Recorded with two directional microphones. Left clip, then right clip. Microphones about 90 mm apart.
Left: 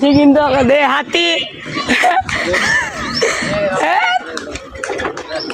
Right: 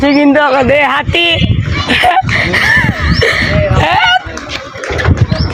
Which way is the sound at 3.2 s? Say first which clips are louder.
Right 4 dB; centre (ahead or behind).